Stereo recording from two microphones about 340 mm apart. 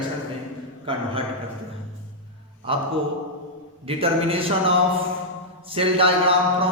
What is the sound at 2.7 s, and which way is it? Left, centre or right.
Speech, centre.